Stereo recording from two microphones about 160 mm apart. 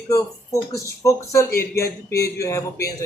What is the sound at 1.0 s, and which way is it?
Speech, 20° left (ahead or behind).